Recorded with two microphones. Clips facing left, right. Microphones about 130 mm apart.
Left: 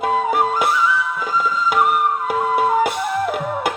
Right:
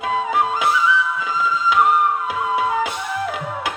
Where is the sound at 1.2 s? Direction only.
55° left (ahead or behind).